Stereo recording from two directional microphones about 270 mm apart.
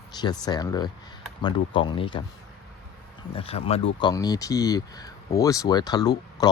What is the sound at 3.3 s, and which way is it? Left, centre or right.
Speech, left.